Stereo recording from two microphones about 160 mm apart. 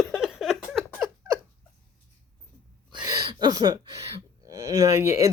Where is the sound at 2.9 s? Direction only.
25° right (ahead or behind).